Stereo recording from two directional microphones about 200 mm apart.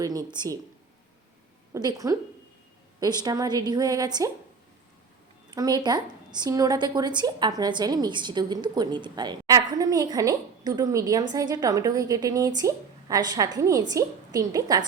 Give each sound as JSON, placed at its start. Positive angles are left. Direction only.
{"t": 0.0, "sound": "a woman's voice", "side_deg": -20}
{"t": 1.7, "sound": "a woman's voice", "side_deg": -20}
{"t": 5.5, "sound": "a woman's voice", "side_deg": -20}